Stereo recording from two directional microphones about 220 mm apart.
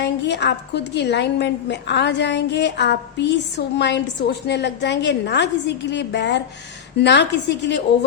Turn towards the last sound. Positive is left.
turn(degrees=50)  # may be behind; listen again after turning